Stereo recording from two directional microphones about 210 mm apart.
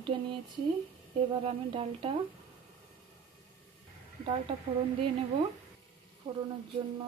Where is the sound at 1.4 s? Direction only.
25° right (ahead or behind).